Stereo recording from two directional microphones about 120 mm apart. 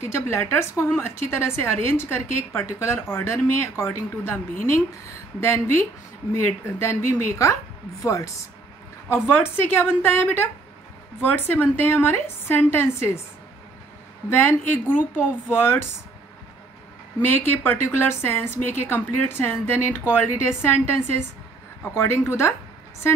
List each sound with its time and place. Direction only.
0.0 s a woman's voice: 25° left (ahead or behind)
14.3 s a woman's voice: 20° left (ahead or behind)
17.2 s a woman's voice: 20° left (ahead or behind)